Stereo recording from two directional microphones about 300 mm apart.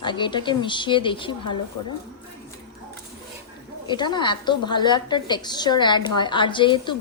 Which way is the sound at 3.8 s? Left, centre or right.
Centre.